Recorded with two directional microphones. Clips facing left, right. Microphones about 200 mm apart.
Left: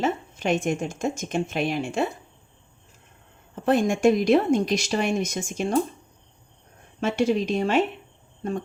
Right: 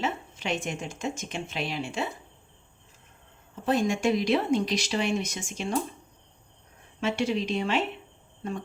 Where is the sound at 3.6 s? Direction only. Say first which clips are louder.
Left 5 dB; 50° left (ahead or behind).